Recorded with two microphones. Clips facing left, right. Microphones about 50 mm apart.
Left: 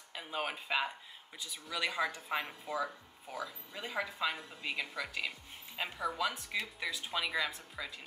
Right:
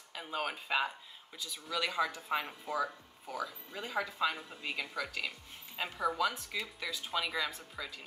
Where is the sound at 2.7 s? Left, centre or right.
Centre.